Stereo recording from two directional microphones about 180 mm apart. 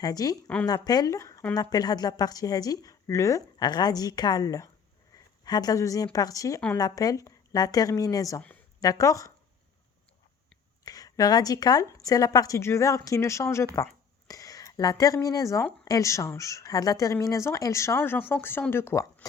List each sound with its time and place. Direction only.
0.0 s a woman's voice: 20° left (ahead or behind)
0.4 s speech: 5° left (ahead or behind)
0.7 s a woman's voice: 20° left (ahead or behind)
10.8 s a woman's voice: 20° left (ahead or behind)